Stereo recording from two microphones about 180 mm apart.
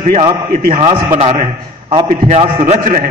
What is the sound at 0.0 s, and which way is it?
A man's voice, 40° right (ahead or behind).